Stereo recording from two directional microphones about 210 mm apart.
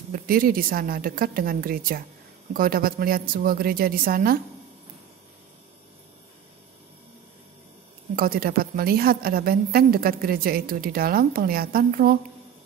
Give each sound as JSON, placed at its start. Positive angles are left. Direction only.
{"t": 0.1, "sound": "a woman's voice", "side_deg": -45}
{"t": 8.2, "sound": "a woman's voice", "side_deg": -45}